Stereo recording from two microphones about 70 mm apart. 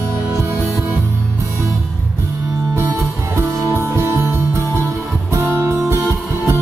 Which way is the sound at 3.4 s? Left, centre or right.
Right.